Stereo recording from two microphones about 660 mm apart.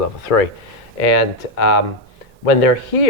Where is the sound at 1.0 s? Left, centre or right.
Left.